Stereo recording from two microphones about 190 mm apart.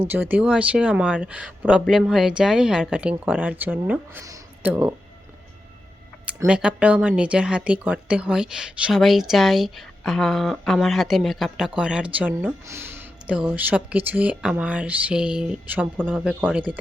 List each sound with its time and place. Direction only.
0.1 s speech: 10° right (ahead or behind)
6.2 s speech: 5° right (ahead or behind)